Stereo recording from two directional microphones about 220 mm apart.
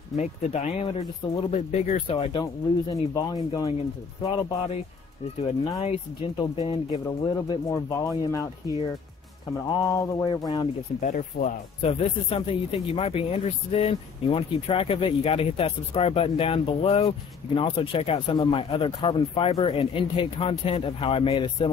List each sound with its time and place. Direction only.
0.1 s speech: 30° left (ahead or behind)
2.1 s speech: 20° left (ahead or behind)
11.0 s speech: 35° left (ahead or behind)